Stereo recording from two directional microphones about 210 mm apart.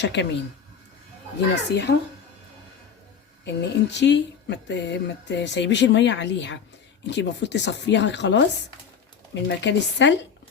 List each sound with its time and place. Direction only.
0.0 s speech: 55° left (ahead or behind)
1.7 s speech: 55° left (ahead or behind)
3.4 s speech: 55° left (ahead or behind)